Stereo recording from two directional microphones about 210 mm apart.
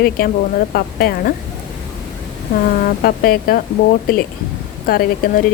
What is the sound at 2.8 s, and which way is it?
Speech, 45° left (ahead or behind).